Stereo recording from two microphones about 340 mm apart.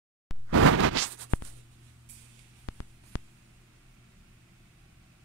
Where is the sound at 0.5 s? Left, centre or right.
Right.